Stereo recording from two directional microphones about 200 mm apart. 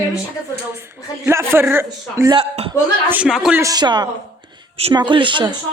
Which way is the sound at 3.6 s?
20° right (ahead or behind).